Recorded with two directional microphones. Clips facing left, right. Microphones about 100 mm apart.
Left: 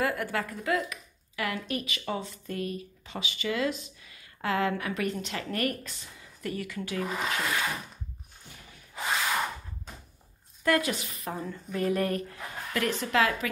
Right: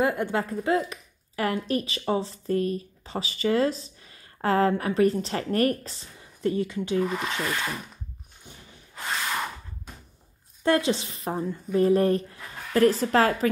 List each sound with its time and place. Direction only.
0.0 s a woman's voice: 25° right (ahead or behind)
7.1 s speech: centre (ahead or behind)
10.6 s a woman's voice: 30° right (ahead or behind)